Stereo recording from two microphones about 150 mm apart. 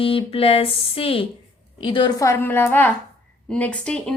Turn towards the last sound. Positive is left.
turn(degrees=5)  # may be behind; listen again after turning